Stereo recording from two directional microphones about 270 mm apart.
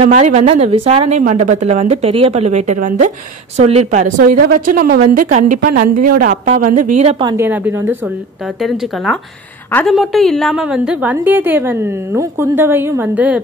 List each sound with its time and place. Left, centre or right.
0.0 s a woman's voice: right; by 13.4 s centre